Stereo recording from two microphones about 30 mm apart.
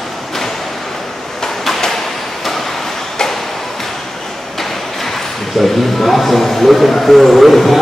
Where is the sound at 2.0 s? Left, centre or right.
Centre.